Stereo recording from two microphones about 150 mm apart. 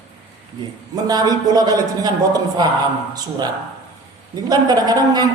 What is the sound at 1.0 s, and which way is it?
A man's voice, 25° right (ahead or behind).